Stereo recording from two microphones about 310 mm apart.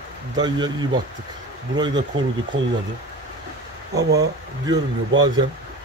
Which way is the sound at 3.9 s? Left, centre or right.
Right.